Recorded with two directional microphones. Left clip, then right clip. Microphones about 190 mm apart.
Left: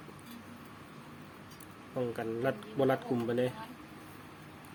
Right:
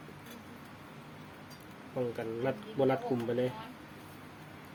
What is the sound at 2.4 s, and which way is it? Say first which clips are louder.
Speech: even; 15° left (ahead or behind).